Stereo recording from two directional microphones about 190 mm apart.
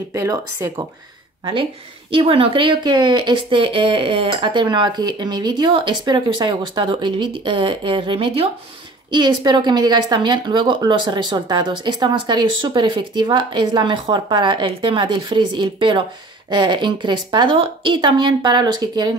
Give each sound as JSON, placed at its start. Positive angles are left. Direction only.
{"t": 0.1, "sound": "speech", "side_deg": -15}
{"t": 1.4, "sound": "speech", "side_deg": -25}